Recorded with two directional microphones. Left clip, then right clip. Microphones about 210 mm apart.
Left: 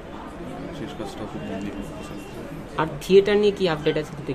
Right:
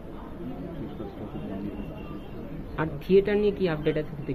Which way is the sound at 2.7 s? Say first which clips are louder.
Left 5 dB; 15° left (ahead or behind).